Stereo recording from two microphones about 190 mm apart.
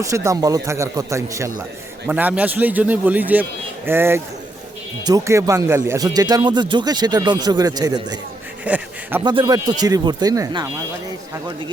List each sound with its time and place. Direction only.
0.0 s speech: 15° right (ahead or behind)
8.6 s speech: 10° right (ahead or behind)
9.2 s speech: 20° right (ahead or behind)